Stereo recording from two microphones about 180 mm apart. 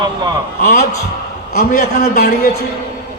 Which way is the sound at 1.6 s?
55° left (ahead or behind).